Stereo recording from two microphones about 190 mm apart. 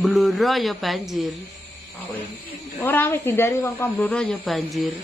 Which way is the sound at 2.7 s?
10° left (ahead or behind).